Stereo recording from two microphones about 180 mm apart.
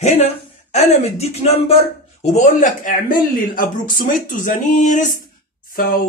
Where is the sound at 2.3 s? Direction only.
45° left (ahead or behind).